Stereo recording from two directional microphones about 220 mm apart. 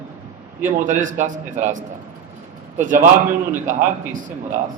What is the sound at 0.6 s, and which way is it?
A man's voice, 35° right (ahead or behind).